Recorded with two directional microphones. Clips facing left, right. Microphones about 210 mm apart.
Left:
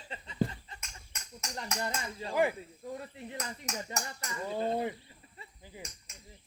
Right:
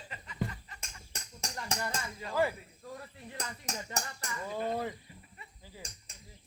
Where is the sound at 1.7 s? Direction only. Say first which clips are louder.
Left 3 dB; 25° left (ahead or behind).